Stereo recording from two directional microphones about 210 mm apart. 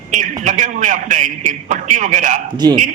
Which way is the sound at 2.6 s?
20° right (ahead or behind).